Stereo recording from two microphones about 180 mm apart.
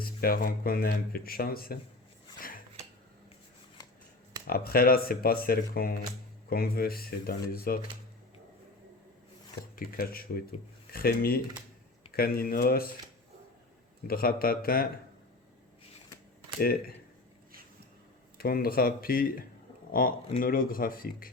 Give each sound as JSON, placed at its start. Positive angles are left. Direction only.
{"t": 0.0, "sound": "speech", "side_deg": 55}
{"t": 4.4, "sound": "speech", "side_deg": 55}
{"t": 9.7, "sound": "speech", "side_deg": 55}
{"t": 14.1, "sound": "speech", "side_deg": 55}
{"t": 16.6, "sound": "speech", "side_deg": 55}
{"t": 18.3, "sound": "speech", "side_deg": 55}